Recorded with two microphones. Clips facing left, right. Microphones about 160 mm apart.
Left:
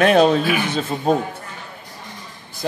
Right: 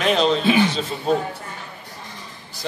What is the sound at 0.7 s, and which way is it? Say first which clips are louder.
Speech: left 3 dB; 50° left (ahead or behind).